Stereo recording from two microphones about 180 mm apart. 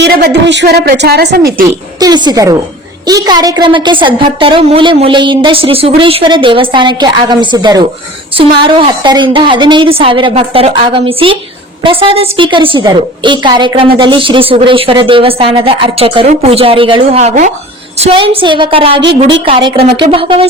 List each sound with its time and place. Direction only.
0.0 s a woman's voice: 75° right (ahead or behind)
1.6 s a woman's voice: 20° right (ahead or behind); by 17.5 s 40° right (ahead or behind)
18.0 s a woman's voice: 30° right (ahead or behind)